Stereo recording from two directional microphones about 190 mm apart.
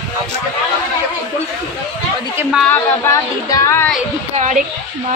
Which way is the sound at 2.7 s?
15° left (ahead or behind).